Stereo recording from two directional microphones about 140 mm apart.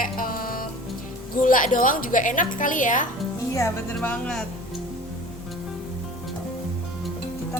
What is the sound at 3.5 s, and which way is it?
Speech, 20° left (ahead or behind).